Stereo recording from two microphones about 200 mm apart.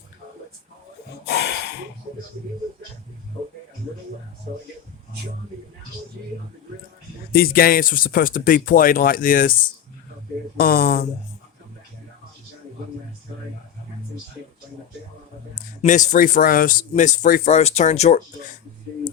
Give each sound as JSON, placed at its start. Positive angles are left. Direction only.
{"t": 1.3, "sound": "snort", "side_deg": 55}
{"t": 7.3, "sound": "speech", "side_deg": 50}
{"t": 10.6, "sound": "speech", "side_deg": 50}
{"t": 15.8, "sound": "speech", "side_deg": 40}